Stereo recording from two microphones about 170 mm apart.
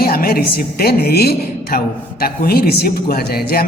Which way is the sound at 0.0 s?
60° left (ahead or behind).